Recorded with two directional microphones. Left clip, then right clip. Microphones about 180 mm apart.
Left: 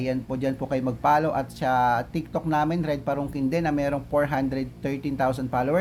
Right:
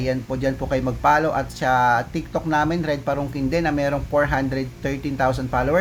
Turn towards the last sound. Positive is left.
turn(degrees=-15)  # may be behind; listen again after turning